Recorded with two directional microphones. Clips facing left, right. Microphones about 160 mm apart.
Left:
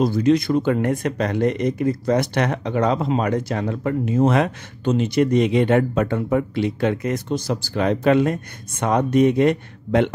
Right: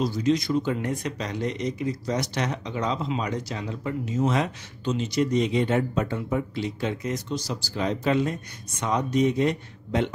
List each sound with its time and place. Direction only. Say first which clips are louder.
0.0 s speech: left 6 dB; 55° left (ahead or behind)